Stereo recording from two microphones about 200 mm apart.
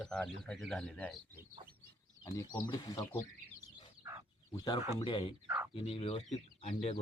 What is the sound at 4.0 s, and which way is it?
Fowl, 15° right (ahead or behind).